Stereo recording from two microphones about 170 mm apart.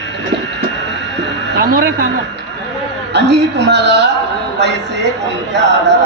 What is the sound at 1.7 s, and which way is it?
Speech, 65° right (ahead or behind).